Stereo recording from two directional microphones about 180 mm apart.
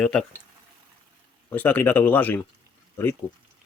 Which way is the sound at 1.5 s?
10° left (ahead or behind).